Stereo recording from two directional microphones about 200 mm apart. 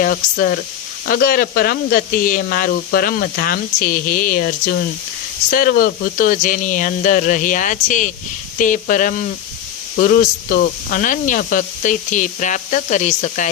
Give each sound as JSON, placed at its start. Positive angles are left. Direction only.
{"t": 0.0, "sound": "speech", "side_deg": 45}